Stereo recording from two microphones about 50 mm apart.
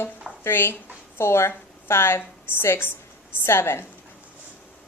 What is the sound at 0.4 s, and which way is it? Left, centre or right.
Speech, left.